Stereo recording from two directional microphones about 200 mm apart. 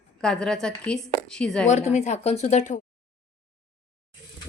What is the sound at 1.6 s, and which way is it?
Speech, 35° left (ahead or behind).